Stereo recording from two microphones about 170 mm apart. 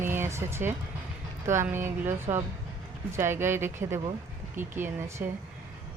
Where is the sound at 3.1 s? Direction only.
15° right (ahead or behind).